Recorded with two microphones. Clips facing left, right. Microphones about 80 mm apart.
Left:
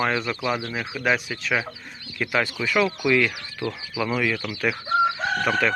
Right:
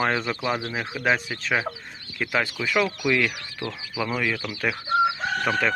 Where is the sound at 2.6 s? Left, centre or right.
Centre.